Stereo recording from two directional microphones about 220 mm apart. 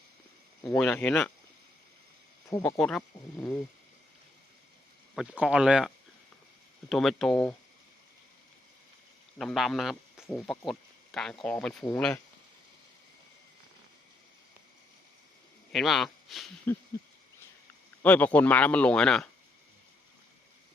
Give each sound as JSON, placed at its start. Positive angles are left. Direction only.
{"t": 0.6, "sound": "speech", "side_deg": 5}
{"t": 2.5, "sound": "speech", "side_deg": 15}
{"t": 2.7, "sound": "speech", "side_deg": 0}
{"t": 5.1, "sound": "speech", "side_deg": 0}
{"t": 9.4, "sound": "speech", "side_deg": 0}
{"t": 15.7, "sound": "speech", "side_deg": 0}
{"t": 18.0, "sound": "speech", "side_deg": 5}